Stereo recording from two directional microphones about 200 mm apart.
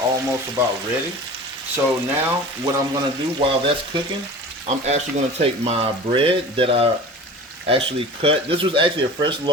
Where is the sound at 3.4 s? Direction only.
25° right (ahead or behind).